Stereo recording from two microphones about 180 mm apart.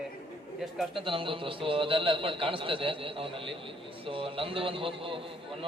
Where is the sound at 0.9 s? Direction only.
30° right (ahead or behind).